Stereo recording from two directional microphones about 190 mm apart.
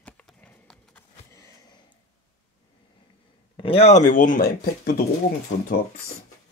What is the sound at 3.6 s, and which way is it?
Speech, 30° left (ahead or behind).